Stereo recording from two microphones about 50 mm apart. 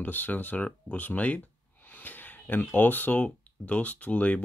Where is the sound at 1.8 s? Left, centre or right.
Left.